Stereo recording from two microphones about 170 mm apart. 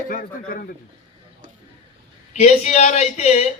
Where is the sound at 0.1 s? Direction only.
55° left (ahead or behind).